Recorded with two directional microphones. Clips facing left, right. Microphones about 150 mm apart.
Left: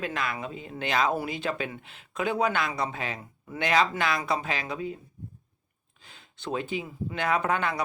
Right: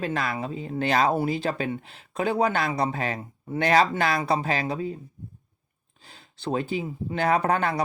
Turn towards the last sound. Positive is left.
turn(degrees=-35)  # may be behind; listen again after turning